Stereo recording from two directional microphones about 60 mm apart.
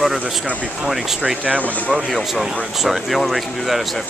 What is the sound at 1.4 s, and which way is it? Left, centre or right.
Speech, right.